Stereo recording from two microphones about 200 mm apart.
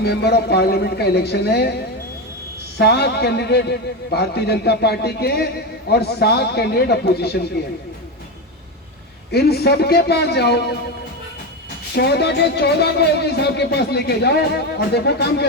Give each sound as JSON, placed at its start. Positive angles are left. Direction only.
{"t": 0.0, "sound": "a man's voice", "side_deg": 55}
{"t": 9.3, "sound": "a man's voice", "side_deg": 50}
{"t": 11.9, "sound": "a man's voice", "side_deg": 55}